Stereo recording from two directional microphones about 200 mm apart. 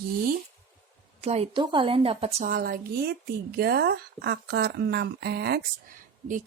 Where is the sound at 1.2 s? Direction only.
30° right (ahead or behind).